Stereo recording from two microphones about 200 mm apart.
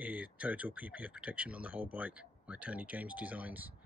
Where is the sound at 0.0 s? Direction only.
5° right (ahead or behind).